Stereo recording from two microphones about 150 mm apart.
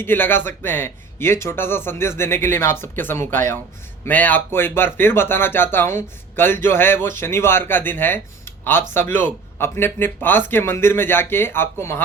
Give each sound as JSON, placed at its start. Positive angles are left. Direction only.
{"t": 0.0, "sound": "speech", "side_deg": 15}